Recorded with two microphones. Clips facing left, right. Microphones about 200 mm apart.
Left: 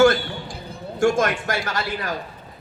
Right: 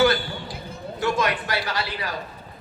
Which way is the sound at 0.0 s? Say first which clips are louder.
Left 4 dB; 45° left (ahead or behind).